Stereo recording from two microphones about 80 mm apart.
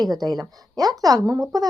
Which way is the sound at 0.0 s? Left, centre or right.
Right.